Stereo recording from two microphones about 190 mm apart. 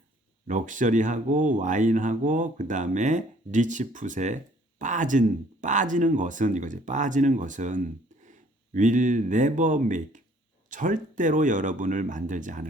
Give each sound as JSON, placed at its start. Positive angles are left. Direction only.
{"t": 0.4, "sound": "speech", "side_deg": -40}